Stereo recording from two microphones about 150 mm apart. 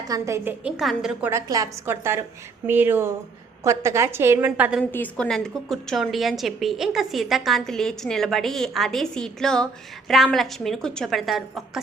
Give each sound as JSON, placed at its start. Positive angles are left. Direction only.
{"t": 0.1, "sound": "a woman's voice", "side_deg": -20}
{"t": 0.6, "sound": "a woman's voice", "side_deg": 0}
{"t": 1.2, "sound": "a woman's voice", "side_deg": -20}
{"t": 4.8, "sound": "a woman's voice", "side_deg": 10}